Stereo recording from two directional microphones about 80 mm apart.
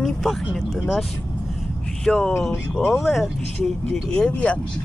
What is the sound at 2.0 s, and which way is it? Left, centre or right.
Speech, centre.